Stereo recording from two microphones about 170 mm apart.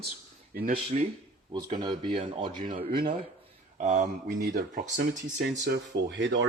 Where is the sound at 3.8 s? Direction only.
45° right (ahead or behind).